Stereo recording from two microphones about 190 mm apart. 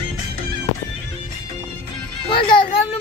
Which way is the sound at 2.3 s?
25° left (ahead or behind).